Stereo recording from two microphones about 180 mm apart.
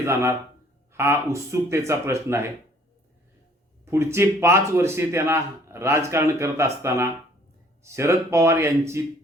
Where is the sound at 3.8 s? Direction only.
15° right (ahead or behind).